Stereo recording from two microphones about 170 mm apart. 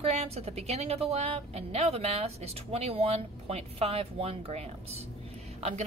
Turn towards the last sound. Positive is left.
turn(degrees=-35)  # may be behind; listen again after turning